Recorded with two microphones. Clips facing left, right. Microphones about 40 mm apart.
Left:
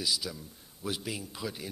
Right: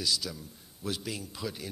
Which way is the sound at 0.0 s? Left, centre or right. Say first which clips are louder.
Right 1 dB; centre.